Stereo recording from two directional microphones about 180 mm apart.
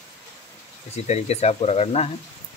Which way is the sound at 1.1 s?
35° left (ahead or behind).